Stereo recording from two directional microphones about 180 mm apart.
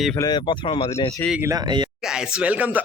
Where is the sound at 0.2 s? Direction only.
25° left (ahead or behind).